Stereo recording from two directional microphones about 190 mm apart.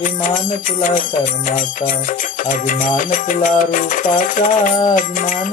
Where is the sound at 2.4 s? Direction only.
45° left (ahead or behind).